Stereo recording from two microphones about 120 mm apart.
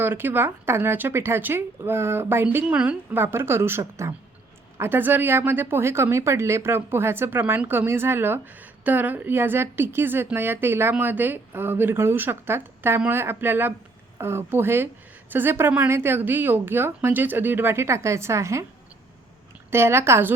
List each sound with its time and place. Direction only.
0.0 s a woman's voice: 15° right (ahead or behind)
19.7 s speech: 20° right (ahead or behind)